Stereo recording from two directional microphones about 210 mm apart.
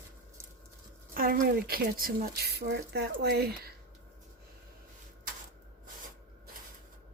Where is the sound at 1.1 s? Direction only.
45° right (ahead or behind).